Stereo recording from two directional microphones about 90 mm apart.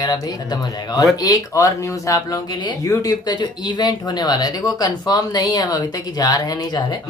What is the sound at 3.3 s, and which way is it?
Speech, 55° left (ahead or behind).